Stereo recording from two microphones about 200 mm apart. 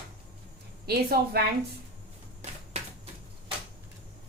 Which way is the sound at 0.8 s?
50° right (ahead or behind).